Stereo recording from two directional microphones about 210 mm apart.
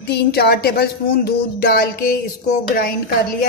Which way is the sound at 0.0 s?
50° left (ahead or behind).